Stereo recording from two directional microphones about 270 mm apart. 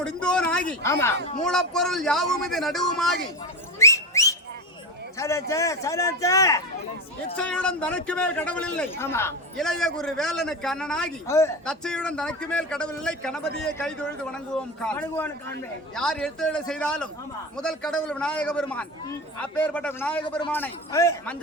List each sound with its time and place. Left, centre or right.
0.0 s a man's voice: centre
3.8 s whistling: centre
5.1 s a man's voice: centre